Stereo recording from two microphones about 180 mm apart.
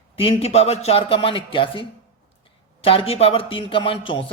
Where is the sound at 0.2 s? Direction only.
35° left (ahead or behind).